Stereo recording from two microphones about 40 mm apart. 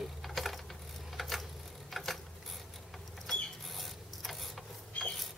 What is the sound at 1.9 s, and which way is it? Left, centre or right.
Mechanisms, centre.